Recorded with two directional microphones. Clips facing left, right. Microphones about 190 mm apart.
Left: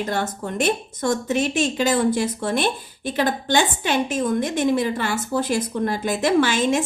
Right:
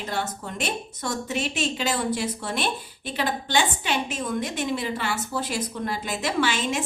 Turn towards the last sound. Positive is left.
turn(degrees=45)  # may be behind; listen again after turning